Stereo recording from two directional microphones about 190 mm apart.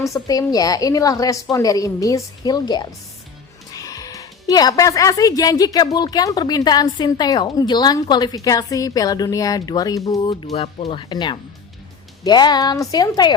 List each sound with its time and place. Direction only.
0.0 s speech: 20° left (ahead or behind)
10.5 s speech: 30° left (ahead or behind)